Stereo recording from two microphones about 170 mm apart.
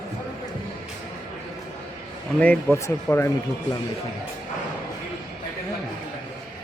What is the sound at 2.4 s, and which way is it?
Speech, 10° left (ahead or behind).